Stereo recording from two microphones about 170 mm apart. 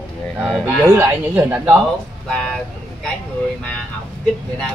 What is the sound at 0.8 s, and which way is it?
Speech, 15° right (ahead or behind).